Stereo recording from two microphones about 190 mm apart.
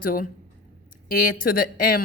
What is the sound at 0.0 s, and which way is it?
A woman's voice, 50° left (ahead or behind).